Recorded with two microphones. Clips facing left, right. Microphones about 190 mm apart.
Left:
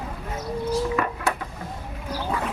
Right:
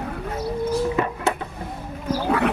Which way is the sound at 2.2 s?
65° right (ahead or behind).